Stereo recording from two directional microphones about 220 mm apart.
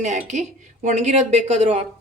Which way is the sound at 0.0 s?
35° right (ahead or behind).